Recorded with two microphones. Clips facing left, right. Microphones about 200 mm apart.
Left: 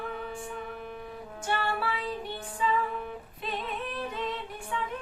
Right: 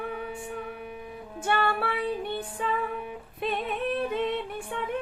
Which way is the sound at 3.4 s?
60° right (ahead or behind).